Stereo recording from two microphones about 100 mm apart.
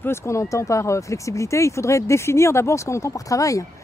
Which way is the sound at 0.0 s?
25° left (ahead or behind).